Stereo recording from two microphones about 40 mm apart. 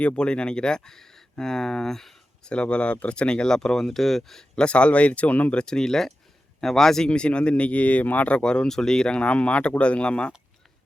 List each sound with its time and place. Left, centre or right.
0.0 s speech: left; by 2.1 s centre
2.4 s speech: left; by 4.4 s centre
4.5 s speech: left
5.5 s speech: centre
7.1 s speech: left
8.4 s speech: left